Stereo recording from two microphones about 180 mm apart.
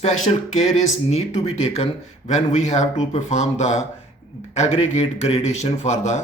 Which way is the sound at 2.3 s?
40° left (ahead or behind).